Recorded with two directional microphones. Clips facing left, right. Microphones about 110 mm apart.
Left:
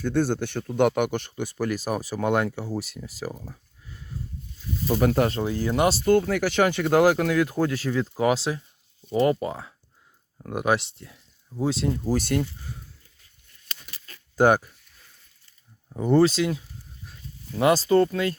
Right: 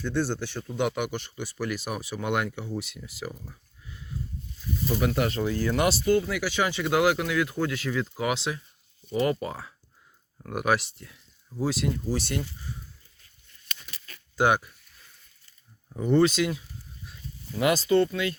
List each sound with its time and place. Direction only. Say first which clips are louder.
0.0 s speech: left 4 dB; 50° left (ahead or behind); by 5.5 s 35° left (ahead or behind)
5.5 s speech: left 2 dB; 20° left (ahead or behind)
6.1 s speech: left 4 dB; 50° left (ahead or behind); by 11.9 s 25° left (ahead or behind)
12.0 s speech: left 5 dB; 45° left (ahead or behind)
14.3 s speech: left 4 dB; 45° left (ahead or behind)
15.9 s speech: left 2 dB; 35° left (ahead or behind)
17.6 s speech: left 3 dB; 30° left (ahead or behind)